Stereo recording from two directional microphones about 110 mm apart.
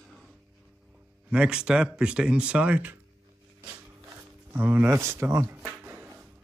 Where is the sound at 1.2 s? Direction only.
10° right (ahead or behind).